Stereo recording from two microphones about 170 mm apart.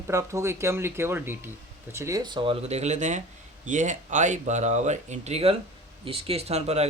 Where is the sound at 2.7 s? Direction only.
40° right (ahead or behind).